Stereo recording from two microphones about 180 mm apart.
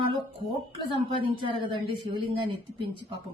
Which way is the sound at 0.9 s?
30° right (ahead or behind).